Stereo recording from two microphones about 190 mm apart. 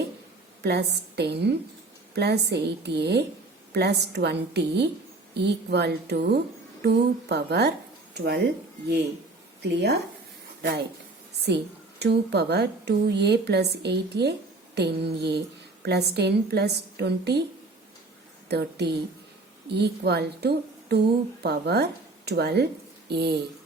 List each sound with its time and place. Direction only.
0.6 s a woman's voice: 60° right (ahead or behind)
9.7 s a woman's voice: 60° right (ahead or behind)
11.4 s a woman's voice: 60° right (ahead or behind)
18.4 s a woman's voice: 60° right (ahead or behind)